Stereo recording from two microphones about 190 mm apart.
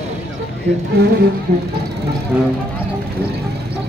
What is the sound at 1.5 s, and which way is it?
Speech, 60° right (ahead or behind).